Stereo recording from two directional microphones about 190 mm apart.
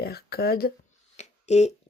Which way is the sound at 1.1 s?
35° left (ahead or behind).